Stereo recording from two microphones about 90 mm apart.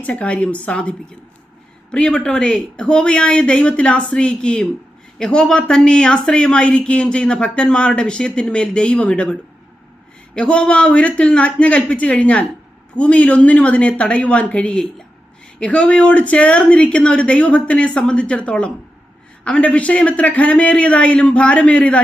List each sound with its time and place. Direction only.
0.0 s speech: 15° left (ahead or behind)